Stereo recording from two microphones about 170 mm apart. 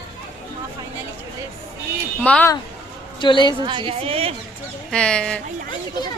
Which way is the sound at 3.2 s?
30° left (ahead or behind).